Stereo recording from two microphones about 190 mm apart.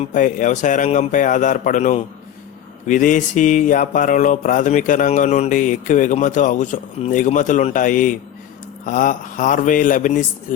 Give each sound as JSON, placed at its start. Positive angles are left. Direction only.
{"t": 0.0, "sound": "speech", "side_deg": 40}